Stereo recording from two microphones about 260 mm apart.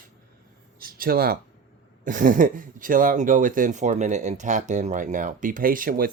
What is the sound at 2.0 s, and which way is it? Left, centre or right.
Speech, right.